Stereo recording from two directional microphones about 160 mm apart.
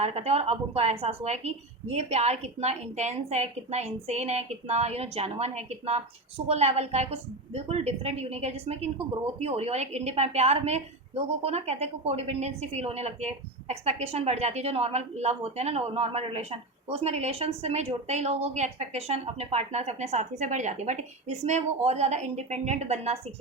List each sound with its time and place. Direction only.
0.0 s a woman's voice: 40° right (ahead or behind)